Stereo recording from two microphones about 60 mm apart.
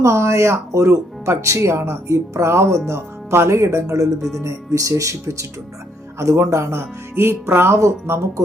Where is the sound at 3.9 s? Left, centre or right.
Right.